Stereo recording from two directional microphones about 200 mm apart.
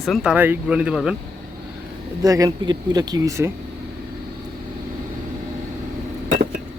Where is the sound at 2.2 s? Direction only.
15° right (ahead or behind).